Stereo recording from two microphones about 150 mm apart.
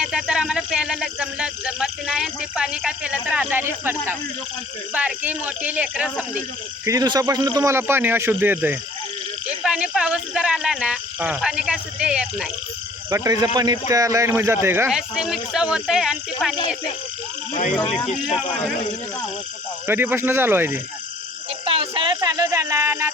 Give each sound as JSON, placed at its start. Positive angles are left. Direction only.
{"t": 0.0, "sound": "speech", "side_deg": -5}
{"t": 6.8, "sound": "speech", "side_deg": -25}
{"t": 13.1, "sound": "speech", "side_deg": -20}
{"t": 14.8, "sound": "speech", "side_deg": -5}
{"t": 17.9, "sound": "speech", "side_deg": 5}
{"t": 19.9, "sound": "speech", "side_deg": -15}
{"t": 21.6, "sound": "a sound", "side_deg": -40}
{"t": 22.2, "sound": "a sound", "side_deg": -25}